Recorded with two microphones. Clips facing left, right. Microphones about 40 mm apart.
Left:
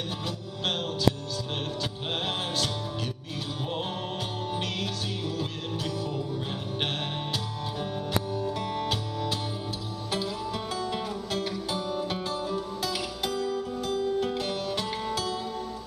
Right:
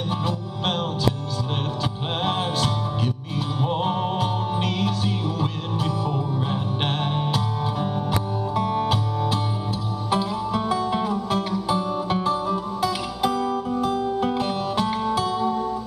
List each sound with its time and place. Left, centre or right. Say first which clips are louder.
2.2 s music: right 8 dB; centre